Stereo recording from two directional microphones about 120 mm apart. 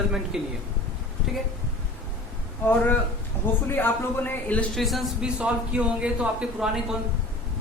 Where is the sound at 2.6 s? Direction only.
15° left (ahead or behind).